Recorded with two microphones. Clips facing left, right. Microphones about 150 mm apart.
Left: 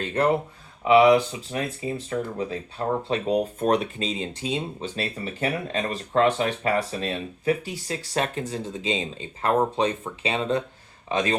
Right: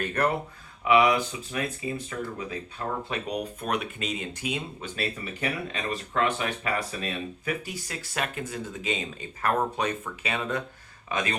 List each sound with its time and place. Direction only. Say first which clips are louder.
0.0 s speech: left 4 dB; 25° left (ahead or behind)